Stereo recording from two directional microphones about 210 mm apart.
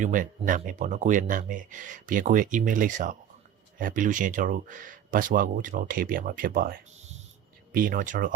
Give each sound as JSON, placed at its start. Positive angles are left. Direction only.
{"t": 0.0, "sound": "speech", "side_deg": -40}